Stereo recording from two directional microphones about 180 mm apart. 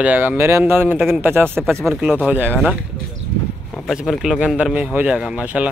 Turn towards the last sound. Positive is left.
turn(degrees=-5)  # may be behind; listen again after turning